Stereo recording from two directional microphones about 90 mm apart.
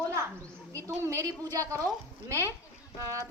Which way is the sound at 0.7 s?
35° right (ahead or behind).